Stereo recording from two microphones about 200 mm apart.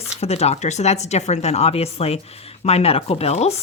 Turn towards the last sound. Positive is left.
turn(degrees=30)  # may be behind; listen again after turning